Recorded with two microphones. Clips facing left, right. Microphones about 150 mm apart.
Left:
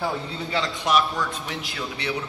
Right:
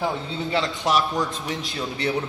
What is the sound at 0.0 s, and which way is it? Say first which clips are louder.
A man's voice: right 2 dB; 25° right (ahead or behind).